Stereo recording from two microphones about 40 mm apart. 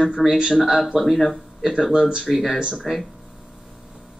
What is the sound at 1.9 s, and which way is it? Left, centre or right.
Speech, right.